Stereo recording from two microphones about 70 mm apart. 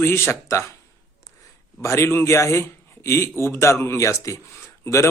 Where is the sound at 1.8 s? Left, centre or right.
Left.